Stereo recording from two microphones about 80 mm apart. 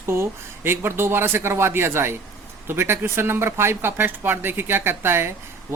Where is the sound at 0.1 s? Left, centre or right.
Right.